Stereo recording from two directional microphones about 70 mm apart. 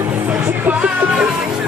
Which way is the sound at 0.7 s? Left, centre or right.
Centre.